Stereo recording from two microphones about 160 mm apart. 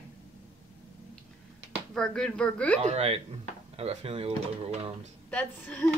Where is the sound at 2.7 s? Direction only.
40° right (ahead or behind).